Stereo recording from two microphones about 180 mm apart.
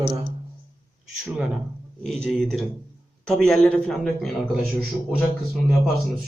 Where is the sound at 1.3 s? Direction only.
Centre (ahead or behind).